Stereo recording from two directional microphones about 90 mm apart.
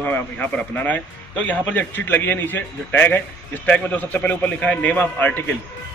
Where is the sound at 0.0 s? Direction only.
20° left (ahead or behind).